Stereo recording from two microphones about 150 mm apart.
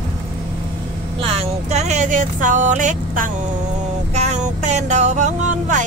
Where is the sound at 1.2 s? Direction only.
45° right (ahead or behind).